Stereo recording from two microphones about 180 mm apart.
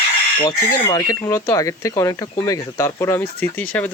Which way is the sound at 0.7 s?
20° left (ahead or behind).